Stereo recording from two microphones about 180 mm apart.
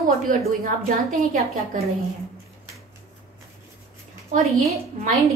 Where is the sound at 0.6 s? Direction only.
50° right (ahead or behind).